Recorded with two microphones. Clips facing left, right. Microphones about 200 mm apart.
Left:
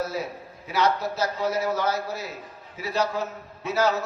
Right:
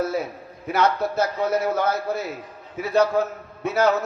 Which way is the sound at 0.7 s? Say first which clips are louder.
Right 3 dB; 55° right (ahead or behind).